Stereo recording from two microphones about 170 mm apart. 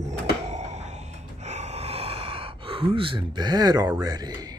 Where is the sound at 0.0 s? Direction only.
40° right (ahead or behind).